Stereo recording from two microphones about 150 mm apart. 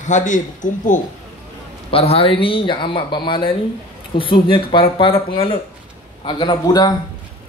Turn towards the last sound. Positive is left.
turn(degrees=25)  # may be behind; listen again after turning